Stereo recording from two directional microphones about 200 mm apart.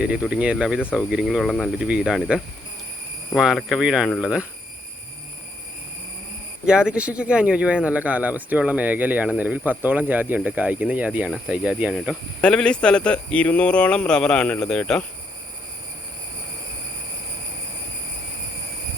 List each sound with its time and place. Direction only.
0.0 s speech: 5° right (ahead or behind)
6.7 s speech: 5° right (ahead or behind)
12.4 s speech: 5° left (ahead or behind)